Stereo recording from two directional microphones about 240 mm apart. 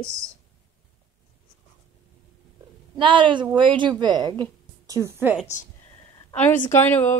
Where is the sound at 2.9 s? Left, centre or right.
Centre.